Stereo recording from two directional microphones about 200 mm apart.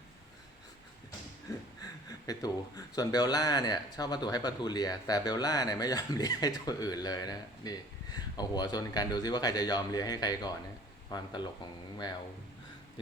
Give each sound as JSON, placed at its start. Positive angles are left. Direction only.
{"t": 2.0, "sound": "speech", "side_deg": 20}